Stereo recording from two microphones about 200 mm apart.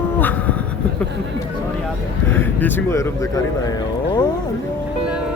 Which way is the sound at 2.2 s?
10° left (ahead or behind).